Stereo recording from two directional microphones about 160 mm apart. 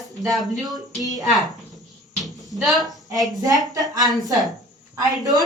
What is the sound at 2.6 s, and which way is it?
Speech, centre (ahead or behind).